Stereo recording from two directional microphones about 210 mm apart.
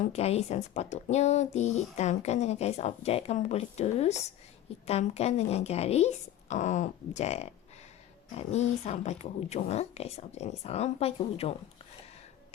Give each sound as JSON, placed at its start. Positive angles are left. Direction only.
{"t": 0.0, "sound": "speech", "side_deg": 30}